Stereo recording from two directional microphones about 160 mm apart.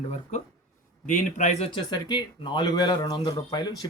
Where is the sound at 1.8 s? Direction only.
25° left (ahead or behind).